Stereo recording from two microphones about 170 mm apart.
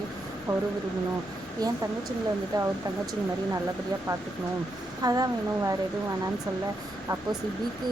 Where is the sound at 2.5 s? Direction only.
20° right (ahead or behind).